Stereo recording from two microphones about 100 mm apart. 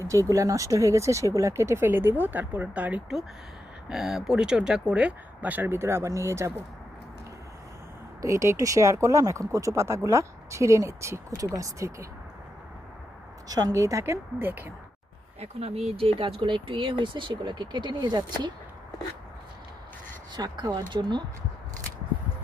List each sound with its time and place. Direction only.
0.0 s speech: 30° right (ahead or behind)
8.2 s speech: 30° right (ahead or behind)
13.5 s speech: 40° right (ahead or behind); by 14.7 s 20° right (ahead or behind)
15.4 s speech: 90° right
15.9 s speech: 70° right (ahead or behind); by 18.5 s 45° right (ahead or behind)
20.3 s speech: 40° right (ahead or behind)